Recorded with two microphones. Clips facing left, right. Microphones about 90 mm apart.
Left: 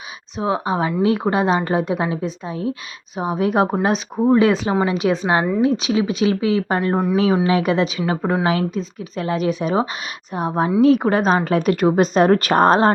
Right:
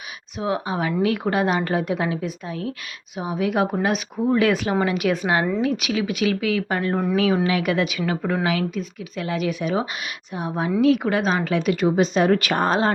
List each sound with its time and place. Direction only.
0.3 s a woman's voice: 30° left (ahead or behind)
3.2 s a woman's voice: 40° left (ahead or behind)